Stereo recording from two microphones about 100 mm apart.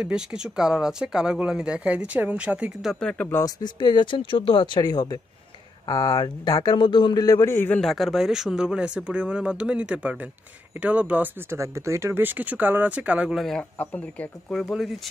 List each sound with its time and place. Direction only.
0.0 s speech: 10° right (ahead or behind)
3.0 s speech: 10° left (ahead or behind)
3.4 s speech: 45° left (ahead or behind)
6.8 s a man's voice: 55° left (ahead or behind)
7.2 s speech: 40° left (ahead or behind)
7.5 s a man's voice: 20° left (ahead or behind)
7.8 s speech: centre (ahead or behind)
11.5 s speech: 30° right (ahead or behind); by 13.4 s 10° right (ahead or behind)
13.4 s speech: 5° left (ahead or behind)
13.7 s speech: 15° left (ahead or behind)
14.5 s speech: centre (ahead or behind)